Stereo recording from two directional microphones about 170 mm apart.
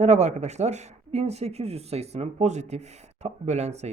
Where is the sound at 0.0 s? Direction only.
40° right (ahead or behind).